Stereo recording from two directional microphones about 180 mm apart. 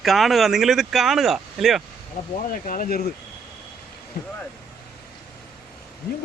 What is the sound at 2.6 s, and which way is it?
Speech, 50° left (ahead or behind).